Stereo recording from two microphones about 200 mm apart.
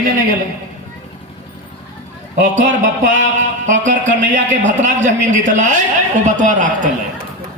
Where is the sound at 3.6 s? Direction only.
40° right (ahead or behind).